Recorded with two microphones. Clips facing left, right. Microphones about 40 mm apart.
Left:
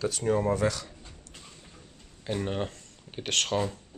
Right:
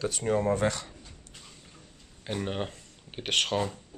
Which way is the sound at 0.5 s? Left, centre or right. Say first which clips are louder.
Even; right.